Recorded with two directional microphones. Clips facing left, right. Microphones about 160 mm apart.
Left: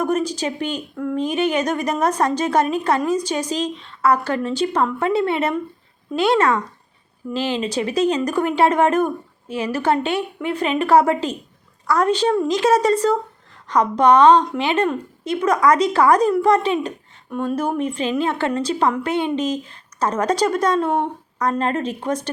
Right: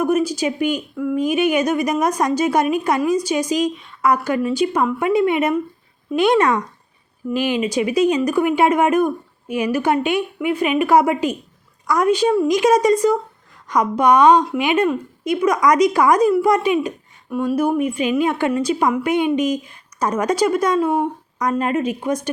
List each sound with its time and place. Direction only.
0.0 s a woman's voice: 10° right (ahead or behind)